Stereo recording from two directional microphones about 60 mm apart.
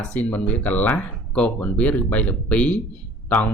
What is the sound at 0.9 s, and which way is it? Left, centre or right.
Speech, centre.